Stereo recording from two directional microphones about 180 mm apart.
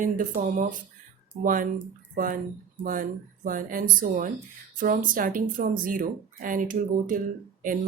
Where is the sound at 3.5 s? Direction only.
50° right (ahead or behind).